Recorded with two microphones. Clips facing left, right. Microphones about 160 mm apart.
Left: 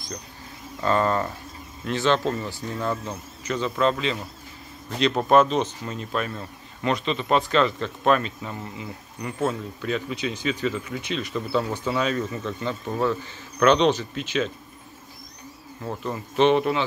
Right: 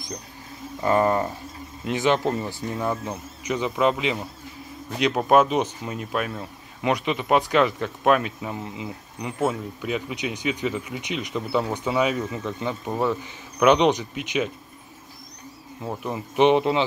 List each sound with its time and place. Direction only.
0.7 s speech: 15° right (ahead or behind)
15.8 s speech: 15° right (ahead or behind)